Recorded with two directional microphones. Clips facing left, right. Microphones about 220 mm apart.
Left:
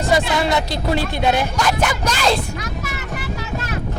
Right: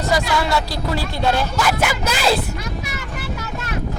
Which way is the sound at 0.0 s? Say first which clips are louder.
Left 2 dB; 25° left (ahead or behind).